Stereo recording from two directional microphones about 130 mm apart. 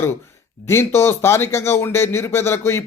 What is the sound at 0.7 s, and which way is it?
A man's voice, 20° left (ahead or behind).